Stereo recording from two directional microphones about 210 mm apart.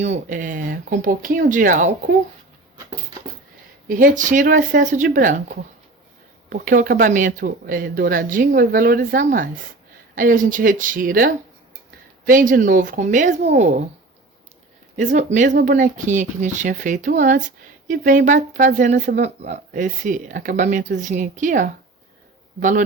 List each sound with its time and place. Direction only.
0.0 s speech: 35° right (ahead or behind)
3.8 s speech: 40° right (ahead or behind)
6.5 s speech: 40° right (ahead or behind)
14.9 s speech: 35° right (ahead or behind)